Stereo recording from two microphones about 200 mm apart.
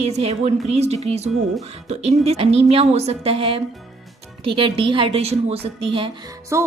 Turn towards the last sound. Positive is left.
turn(degrees=-15)  # may be behind; listen again after turning